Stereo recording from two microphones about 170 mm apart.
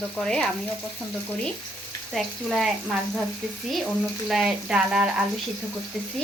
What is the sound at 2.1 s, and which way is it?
Speech, centre (ahead or behind).